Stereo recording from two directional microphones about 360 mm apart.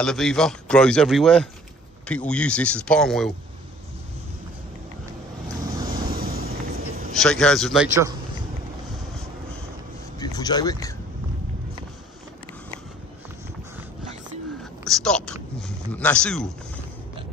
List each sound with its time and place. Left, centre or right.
0.0 s a man's voice: centre
6.0 s vehicle: right
7.2 s a man's voice: centre
10.1 s speech: centre
14.6 s speech: centre